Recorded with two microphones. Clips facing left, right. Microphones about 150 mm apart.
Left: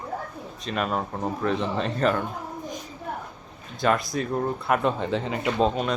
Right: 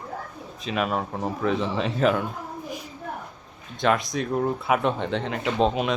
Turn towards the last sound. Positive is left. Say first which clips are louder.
# right 1 dB
turn(degrees=-10)  # may be behind; listen again after turning